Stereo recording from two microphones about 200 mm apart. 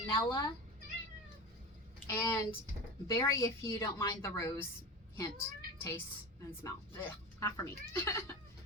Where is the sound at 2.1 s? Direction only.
20° left (ahead or behind).